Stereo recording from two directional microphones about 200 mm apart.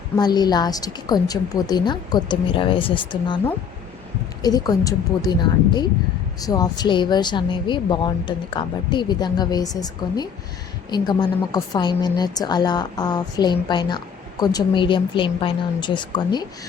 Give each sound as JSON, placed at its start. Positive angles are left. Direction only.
{"t": 0.2, "sound": "a woman's voice", "side_deg": 20}
{"t": 4.4, "sound": "a woman's voice", "side_deg": 20}